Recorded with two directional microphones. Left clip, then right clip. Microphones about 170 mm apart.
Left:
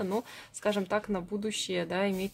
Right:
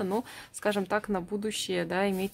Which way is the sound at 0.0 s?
25° right (ahead or behind).